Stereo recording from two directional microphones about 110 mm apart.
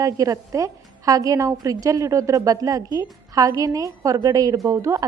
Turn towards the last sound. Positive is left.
turn(degrees=-30)  # may be behind; listen again after turning